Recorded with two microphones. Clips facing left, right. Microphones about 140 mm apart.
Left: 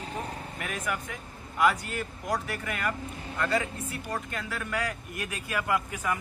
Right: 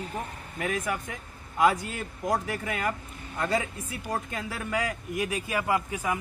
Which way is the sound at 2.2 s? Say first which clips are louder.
Right 5 dB; 25° right (ahead or behind).